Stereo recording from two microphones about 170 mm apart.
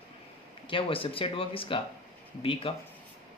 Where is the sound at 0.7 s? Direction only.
30° left (ahead or behind).